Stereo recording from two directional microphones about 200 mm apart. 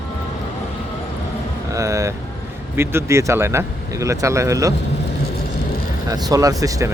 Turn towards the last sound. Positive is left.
turn(degrees=-15)  # may be behind; listen again after turning